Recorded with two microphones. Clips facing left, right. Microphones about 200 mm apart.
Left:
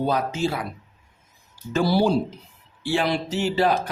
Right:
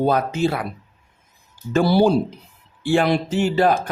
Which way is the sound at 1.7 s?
60° right (ahead or behind).